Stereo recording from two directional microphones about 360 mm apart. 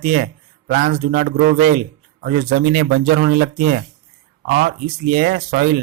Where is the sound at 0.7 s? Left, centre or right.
Right.